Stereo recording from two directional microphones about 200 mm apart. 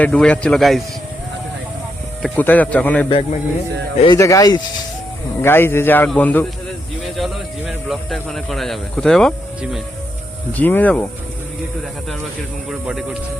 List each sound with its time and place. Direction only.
0.0 s a man's voice: 5° left (ahead or behind)
2.2 s speech: 10° left (ahead or behind)
3.9 s speech: 25° left (ahead or behind)
4.2 s speech: 15° left (ahead or behind)
12.7 s a man's voice: centre (ahead or behind)